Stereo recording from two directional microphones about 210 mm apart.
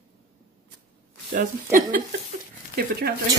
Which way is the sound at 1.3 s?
40° right (ahead or behind).